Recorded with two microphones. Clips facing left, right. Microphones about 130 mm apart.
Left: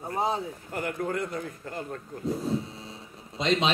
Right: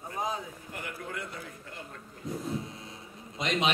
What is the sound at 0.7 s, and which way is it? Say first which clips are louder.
A man's voice: left 10 dB; 45° left (ahead or behind).